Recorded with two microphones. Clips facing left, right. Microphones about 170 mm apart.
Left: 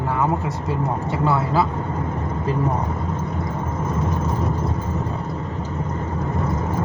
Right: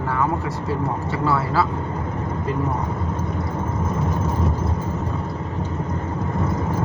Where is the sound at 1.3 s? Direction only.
20° left (ahead or behind).